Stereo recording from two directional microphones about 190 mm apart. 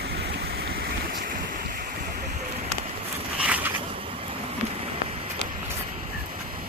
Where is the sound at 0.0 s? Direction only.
60° right (ahead or behind).